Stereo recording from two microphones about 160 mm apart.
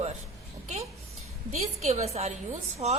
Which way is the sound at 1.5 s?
45° right (ahead or behind).